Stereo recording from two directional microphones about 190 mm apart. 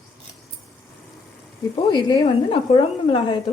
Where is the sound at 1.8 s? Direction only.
25° left (ahead or behind).